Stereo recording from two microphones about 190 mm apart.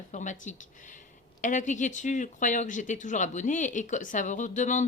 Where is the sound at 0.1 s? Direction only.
40° left (ahead or behind).